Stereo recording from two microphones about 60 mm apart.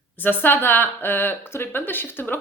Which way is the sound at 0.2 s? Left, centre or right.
Left.